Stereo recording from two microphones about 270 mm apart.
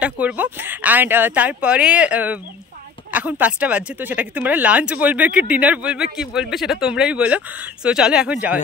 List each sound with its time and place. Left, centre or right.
0.0 s speech: centre